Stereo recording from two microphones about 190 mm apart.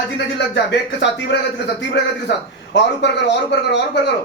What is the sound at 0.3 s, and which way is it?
A man's voice, 65° left (ahead or behind).